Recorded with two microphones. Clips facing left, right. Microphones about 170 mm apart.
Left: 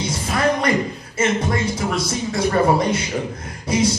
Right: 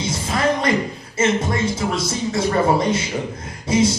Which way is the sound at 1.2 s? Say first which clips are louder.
Right 1 dB; 25° right (ahead or behind).